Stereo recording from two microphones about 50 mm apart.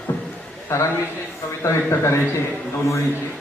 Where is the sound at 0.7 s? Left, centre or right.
Left.